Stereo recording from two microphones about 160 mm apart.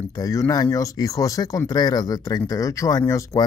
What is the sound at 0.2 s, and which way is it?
Speech, 20° left (ahead or behind).